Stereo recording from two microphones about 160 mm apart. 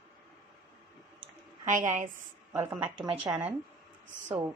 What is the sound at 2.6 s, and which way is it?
Speech, 15° right (ahead or behind).